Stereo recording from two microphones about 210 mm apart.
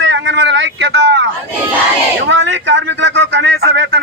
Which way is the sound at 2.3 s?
60° right (ahead or behind).